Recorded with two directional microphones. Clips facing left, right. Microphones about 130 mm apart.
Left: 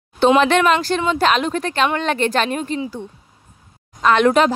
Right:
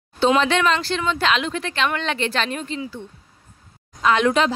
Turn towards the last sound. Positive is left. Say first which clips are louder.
# left 4 dB
turn(degrees=55)  # may be behind; listen again after turning